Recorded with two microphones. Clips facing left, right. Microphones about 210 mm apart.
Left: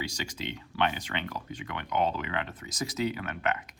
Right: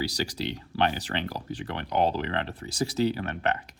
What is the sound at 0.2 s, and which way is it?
Speech, 35° right (ahead or behind).